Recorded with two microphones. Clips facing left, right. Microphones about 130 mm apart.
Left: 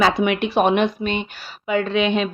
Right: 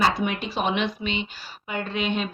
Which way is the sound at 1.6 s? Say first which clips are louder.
Left 8 dB; 90° left.